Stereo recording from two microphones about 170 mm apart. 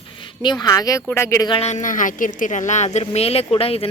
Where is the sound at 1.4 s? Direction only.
35° left (ahead or behind).